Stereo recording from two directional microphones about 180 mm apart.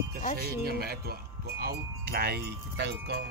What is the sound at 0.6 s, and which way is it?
Wind chime, 60° right (ahead or behind).